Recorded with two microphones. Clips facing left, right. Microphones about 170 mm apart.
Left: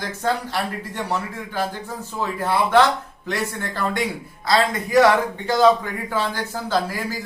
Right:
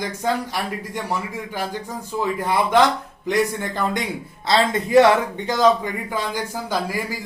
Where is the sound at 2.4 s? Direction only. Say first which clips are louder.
Left 1 dB; 15° right (ahead or behind).